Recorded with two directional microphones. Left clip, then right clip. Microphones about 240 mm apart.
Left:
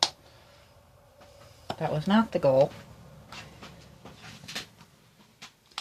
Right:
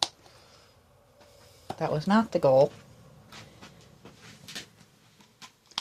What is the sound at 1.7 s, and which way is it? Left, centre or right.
Speech, right.